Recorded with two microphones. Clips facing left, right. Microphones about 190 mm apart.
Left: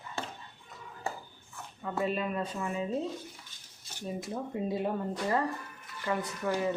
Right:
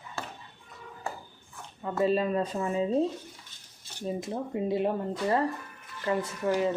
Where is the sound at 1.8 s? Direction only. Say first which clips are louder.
Right 6 dB; 35° right (ahead or behind).